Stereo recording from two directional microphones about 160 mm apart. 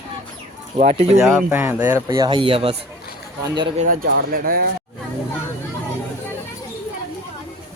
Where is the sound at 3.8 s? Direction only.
65° right (ahead or behind).